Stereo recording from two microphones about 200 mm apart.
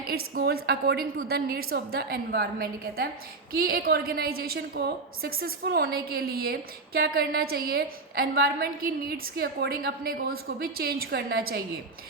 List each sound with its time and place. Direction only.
0.3 s a woman's voice: 50° right (ahead or behind)